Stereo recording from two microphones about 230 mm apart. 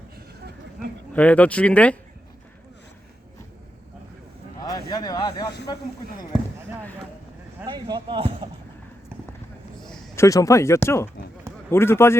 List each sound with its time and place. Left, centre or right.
1.1 s speech: centre
4.6 s speech: centre
7.6 s speech: centre
9.8 s a sound: centre
10.2 s speech: centre